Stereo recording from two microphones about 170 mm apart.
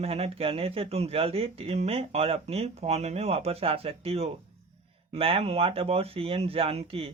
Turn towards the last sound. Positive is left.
turn(degrees=-35)  # may be behind; listen again after turning